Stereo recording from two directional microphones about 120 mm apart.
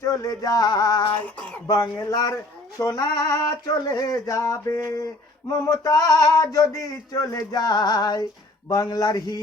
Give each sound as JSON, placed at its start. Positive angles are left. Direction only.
{"t": 0.0, "sound": "male singing", "side_deg": 30}
{"t": 1.2, "sound": "speech", "side_deg": 10}
{"t": 1.6, "sound": "speech", "side_deg": 30}
{"t": 5.5, "sound": "male singing", "side_deg": 30}